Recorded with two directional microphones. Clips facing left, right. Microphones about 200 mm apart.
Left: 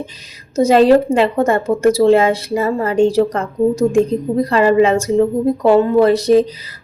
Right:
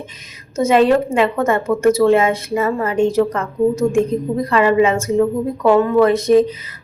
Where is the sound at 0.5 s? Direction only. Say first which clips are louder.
Left 3 dB; 35° left (ahead or behind).